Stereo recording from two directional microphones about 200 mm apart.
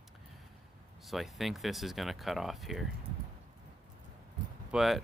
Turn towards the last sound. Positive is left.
turn(degrees=0)  # may be behind; listen again after turning